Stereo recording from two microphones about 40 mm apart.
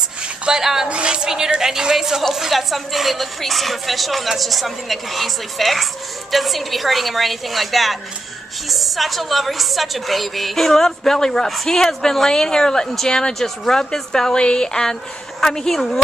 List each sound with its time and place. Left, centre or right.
0.2 s a sound: centre
0.8 s speech: right
1.6 s a woman's voice: centre